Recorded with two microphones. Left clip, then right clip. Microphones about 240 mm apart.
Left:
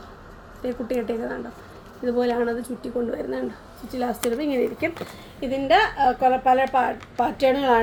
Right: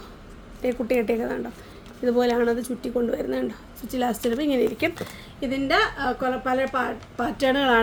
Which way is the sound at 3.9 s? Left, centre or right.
Right.